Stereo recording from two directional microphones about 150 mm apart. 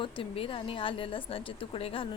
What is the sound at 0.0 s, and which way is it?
A woman's voice, 35° left (ahead or behind).